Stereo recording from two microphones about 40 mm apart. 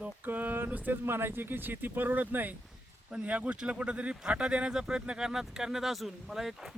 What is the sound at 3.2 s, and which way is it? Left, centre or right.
Speech, right.